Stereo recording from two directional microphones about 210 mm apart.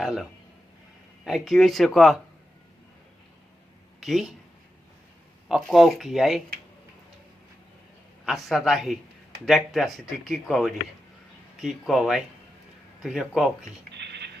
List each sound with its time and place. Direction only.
0.0 s a man's voice: centre (ahead or behind)
4.0 s speech: centre (ahead or behind)
5.5 s speech: centre (ahead or behind)
8.2 s speech: centre (ahead or behind)
13.9 s scratch: 55° right (ahead or behind)